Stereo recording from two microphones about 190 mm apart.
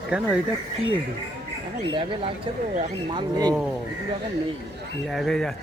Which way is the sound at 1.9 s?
25° right (ahead or behind).